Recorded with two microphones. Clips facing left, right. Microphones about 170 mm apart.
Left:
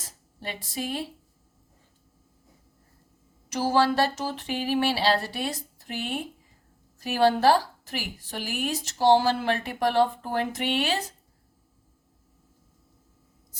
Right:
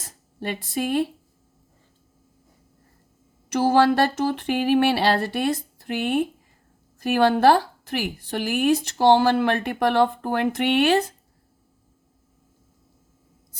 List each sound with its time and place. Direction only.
0.3 s a woman's voice: 55° right (ahead or behind)
3.5 s a woman's voice: 55° right (ahead or behind)